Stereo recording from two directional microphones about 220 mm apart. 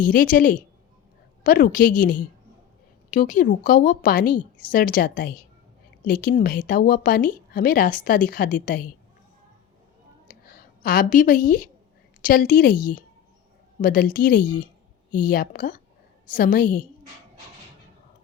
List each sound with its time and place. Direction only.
0.0 s speech: 40° left (ahead or behind)
10.2 s a sound: 40° left (ahead or behind)
12.2 s speech: 40° left (ahead or behind)